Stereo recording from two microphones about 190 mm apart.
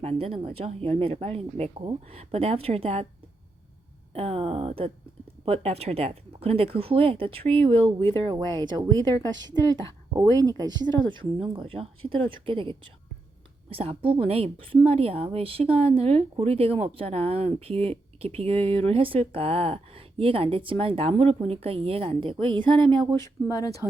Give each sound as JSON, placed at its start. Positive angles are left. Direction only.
{"t": 0.0, "sound": "a woman's voice", "side_deg": -30}
{"t": 4.1, "sound": "a woman's voice", "side_deg": -30}
{"t": 23.2, "sound": "speech", "side_deg": 20}